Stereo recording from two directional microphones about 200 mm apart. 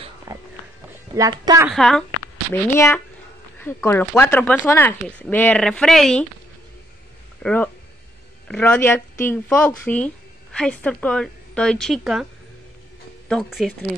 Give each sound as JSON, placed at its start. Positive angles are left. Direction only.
{"t": 0.3, "sound": "music", "side_deg": -15}
{"t": 1.1, "sound": "speech", "side_deg": -20}
{"t": 1.7, "sound": "speech", "side_deg": 0}
{"t": 2.5, "sound": "speech", "side_deg": 10}
{"t": 7.4, "sound": "speech", "side_deg": 10}
{"t": 13.3, "sound": "speech", "side_deg": 0}